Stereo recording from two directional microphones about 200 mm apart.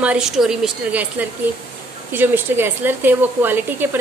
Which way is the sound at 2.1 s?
10° right (ahead or behind).